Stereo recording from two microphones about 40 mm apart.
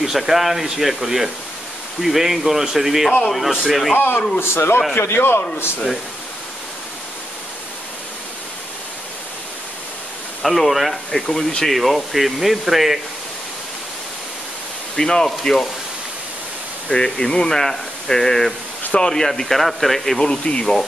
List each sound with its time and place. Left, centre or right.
0.0 s speech: centre
3.9 s speech: left
4.4 s a man's voice: left
10.4 s speech: centre
15.0 s speech: centre
16.9 s speech: centre
20.2 s speech: left